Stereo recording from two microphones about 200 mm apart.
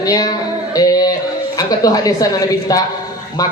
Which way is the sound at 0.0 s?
20° left (ahead or behind).